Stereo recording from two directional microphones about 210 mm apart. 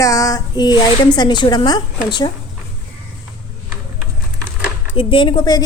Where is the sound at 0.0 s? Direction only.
15° left (ahead or behind).